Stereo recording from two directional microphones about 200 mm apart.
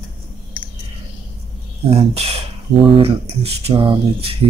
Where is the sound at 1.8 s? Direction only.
30° right (ahead or behind).